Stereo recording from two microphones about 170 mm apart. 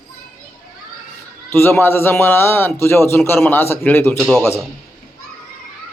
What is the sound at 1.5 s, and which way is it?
A man's voice, 10° left (ahead or behind).